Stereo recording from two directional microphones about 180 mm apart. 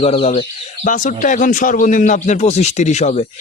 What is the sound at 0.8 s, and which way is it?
A man's voice, 45° left (ahead or behind).